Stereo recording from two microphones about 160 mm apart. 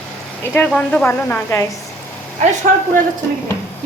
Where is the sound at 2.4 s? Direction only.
50° right (ahead or behind).